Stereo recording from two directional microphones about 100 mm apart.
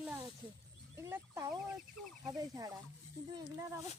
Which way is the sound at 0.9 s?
25° right (ahead or behind).